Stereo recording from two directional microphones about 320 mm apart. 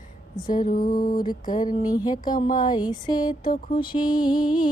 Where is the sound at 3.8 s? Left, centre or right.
Centre.